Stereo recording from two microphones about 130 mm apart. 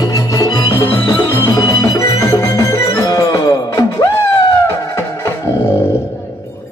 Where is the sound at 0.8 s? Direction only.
15° left (ahead or behind).